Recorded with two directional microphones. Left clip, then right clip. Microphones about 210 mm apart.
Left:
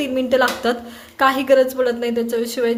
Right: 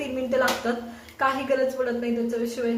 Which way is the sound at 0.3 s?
45° left (ahead or behind).